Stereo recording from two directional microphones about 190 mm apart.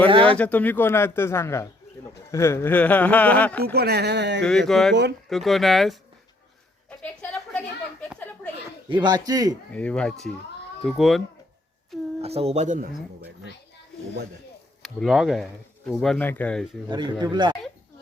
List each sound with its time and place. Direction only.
0.1 s a man's voice: 25° right (ahead or behind)
0.3 s speech: 10° left (ahead or behind)
3.6 s speech: 55° right (ahead or behind)
4.4 s speech: centre (ahead or behind)
7.0 s a sound: 5° left (ahead or behind)
8.9 s a man's voice: 25° right (ahead or behind)
9.7 s speech: 5° left (ahead or behind)
12.2 s speech: 30° right (ahead or behind)
14.8 s speech: centre (ahead or behind)
16.9 s a man's voice: 20° right (ahead or behind)